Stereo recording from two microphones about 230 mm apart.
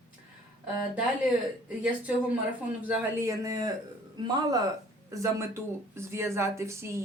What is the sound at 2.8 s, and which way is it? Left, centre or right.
Speech, centre.